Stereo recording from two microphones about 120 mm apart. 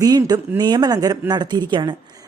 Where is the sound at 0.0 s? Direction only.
30° right (ahead or behind).